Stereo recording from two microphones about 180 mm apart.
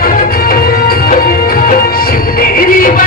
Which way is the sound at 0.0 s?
55° left (ahead or behind).